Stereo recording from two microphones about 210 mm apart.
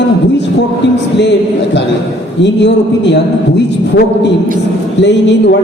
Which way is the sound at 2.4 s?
55° left (ahead or behind).